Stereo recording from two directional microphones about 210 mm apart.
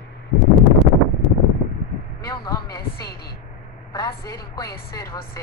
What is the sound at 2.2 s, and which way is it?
A woman's voice, 15° left (ahead or behind).